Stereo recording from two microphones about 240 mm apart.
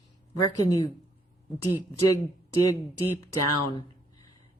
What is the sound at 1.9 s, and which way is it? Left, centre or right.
Speech, left.